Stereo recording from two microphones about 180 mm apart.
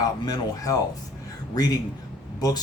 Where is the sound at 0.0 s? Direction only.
20° left (ahead or behind).